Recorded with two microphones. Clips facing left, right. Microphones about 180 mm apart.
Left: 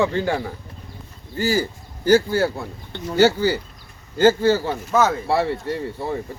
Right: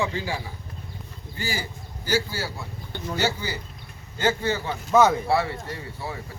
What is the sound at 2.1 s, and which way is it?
Speech, 55° left (ahead or behind).